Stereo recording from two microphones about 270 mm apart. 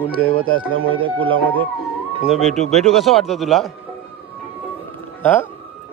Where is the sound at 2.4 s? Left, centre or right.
Right.